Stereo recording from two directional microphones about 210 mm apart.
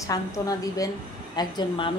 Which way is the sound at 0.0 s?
15° left (ahead or behind).